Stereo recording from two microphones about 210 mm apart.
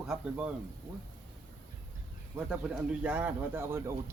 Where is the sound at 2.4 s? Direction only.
5° right (ahead or behind).